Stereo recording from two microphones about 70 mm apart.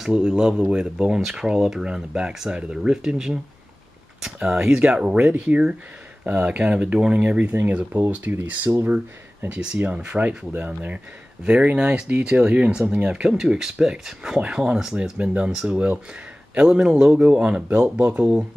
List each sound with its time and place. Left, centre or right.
0.0 s speech: centre
4.2 s a sound: centre
4.6 s speech: centre